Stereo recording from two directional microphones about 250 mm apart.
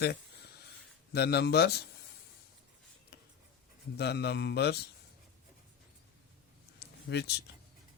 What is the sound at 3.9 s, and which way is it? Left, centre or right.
Speech, left.